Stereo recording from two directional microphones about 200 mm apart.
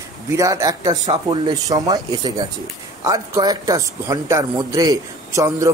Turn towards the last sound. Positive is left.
turn(degrees=-15)  # may be behind; listen again after turning